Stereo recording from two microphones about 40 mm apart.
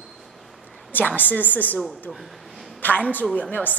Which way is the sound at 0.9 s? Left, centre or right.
Left.